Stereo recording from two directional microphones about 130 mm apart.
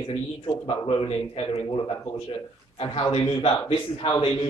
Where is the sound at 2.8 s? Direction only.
45° left (ahead or behind).